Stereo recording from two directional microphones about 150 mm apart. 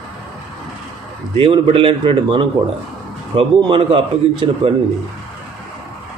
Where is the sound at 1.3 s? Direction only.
40° right (ahead or behind).